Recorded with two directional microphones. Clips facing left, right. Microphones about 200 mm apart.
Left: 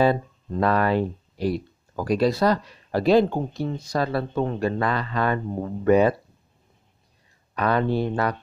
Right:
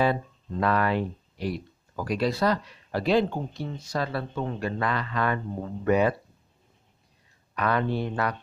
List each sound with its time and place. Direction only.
0.0 s speech: 35° left (ahead or behind)
7.5 s speech: 35° left (ahead or behind)